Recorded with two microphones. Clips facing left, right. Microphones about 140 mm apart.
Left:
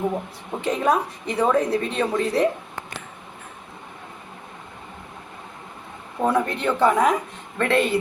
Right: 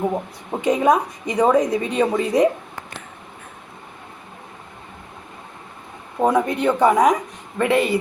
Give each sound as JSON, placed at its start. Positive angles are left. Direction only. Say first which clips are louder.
{"t": 0.6, "sound": "a woman's voice", "louder": "right 4 dB", "side_deg": -15}
{"t": 6.1, "sound": "a woman's voice", "louder": "right 3 dB", "side_deg": -15}